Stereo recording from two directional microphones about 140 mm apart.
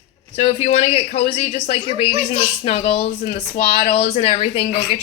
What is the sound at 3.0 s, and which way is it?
Speech, 70° left (ahead or behind).